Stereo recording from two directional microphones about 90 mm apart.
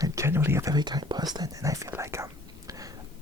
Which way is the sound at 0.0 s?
30° right (ahead or behind).